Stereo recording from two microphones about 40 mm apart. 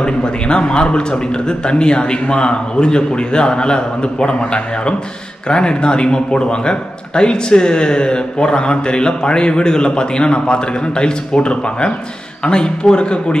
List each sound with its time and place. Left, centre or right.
0.0 s a man's voice: left
5.5 s a man's voice: left